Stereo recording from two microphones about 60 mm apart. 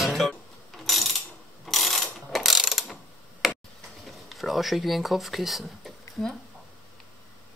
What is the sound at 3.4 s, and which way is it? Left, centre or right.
Tick-tock, centre.